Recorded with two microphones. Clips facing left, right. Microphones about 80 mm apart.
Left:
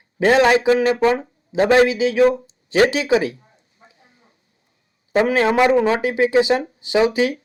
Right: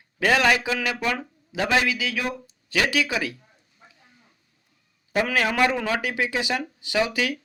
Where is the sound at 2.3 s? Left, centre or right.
Left.